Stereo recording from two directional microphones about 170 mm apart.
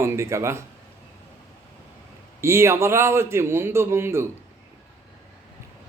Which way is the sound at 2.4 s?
15° right (ahead or behind).